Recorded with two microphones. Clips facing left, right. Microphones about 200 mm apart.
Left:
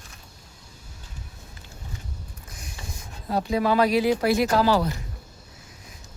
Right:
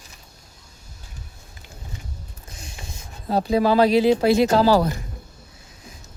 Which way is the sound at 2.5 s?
25° right (ahead or behind).